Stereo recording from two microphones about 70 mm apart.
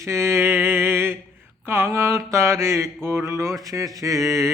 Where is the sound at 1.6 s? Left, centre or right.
Right.